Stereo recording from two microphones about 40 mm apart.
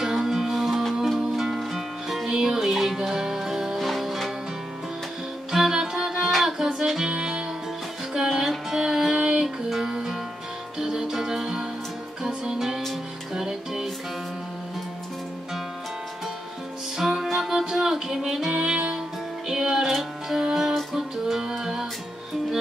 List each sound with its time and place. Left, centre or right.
0.0 s music: centre
5.5 s music: centre
7.1 s music: right
16.9 s music: centre